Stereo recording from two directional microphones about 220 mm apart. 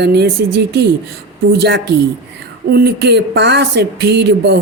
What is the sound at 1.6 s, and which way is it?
Speech, 50° right (ahead or behind).